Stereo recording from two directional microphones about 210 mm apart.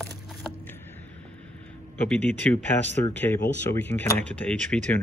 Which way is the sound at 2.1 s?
5° left (ahead or behind).